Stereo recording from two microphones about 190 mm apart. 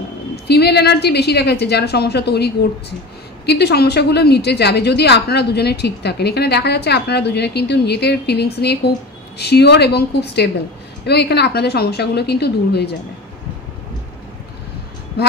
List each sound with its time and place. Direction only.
0.5 s a woman's voice: 60° left (ahead or behind)